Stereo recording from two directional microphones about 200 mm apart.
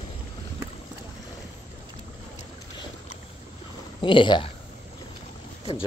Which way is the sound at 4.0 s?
25° left (ahead or behind).